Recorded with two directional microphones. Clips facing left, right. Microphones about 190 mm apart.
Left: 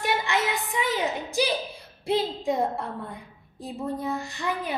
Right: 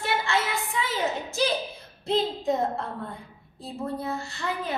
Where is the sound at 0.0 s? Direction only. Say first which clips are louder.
Left 1 dB; 15° left (ahead or behind).